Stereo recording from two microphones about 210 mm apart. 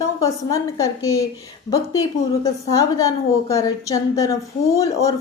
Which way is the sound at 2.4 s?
15° left (ahead or behind).